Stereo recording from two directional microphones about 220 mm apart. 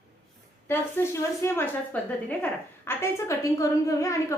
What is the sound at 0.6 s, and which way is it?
A woman's voice, 10° left (ahead or behind).